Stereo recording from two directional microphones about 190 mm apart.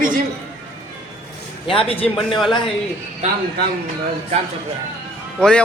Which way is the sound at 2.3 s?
Centre (ahead or behind).